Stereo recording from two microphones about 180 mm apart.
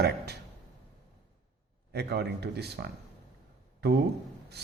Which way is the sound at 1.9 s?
65° right (ahead or behind).